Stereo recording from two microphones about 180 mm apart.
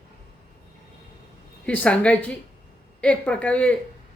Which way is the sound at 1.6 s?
5° left (ahead or behind).